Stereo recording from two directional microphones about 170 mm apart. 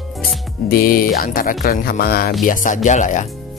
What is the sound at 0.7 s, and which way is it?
Speech, 60° left (ahead or behind).